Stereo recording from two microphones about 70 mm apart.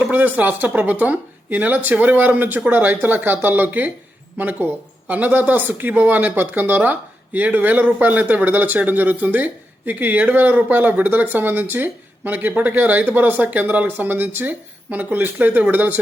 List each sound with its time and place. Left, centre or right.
0.0 s speech: right